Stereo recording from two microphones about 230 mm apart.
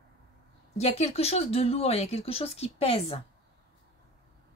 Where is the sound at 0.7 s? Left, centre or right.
Left.